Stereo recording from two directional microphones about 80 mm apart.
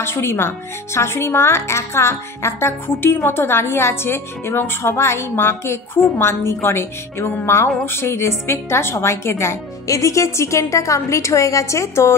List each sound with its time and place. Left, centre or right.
0.0 s speech: left